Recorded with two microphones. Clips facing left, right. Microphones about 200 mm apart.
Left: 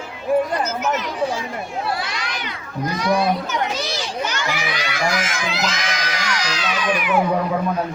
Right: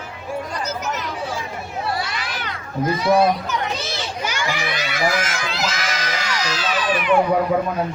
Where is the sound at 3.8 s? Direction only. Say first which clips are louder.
Left 2 dB; 5° right (ahead or behind).